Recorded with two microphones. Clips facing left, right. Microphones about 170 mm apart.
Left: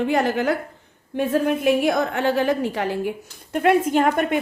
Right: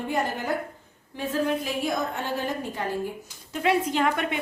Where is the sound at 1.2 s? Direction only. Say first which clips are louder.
Left 6 dB; 60° left (ahead or behind).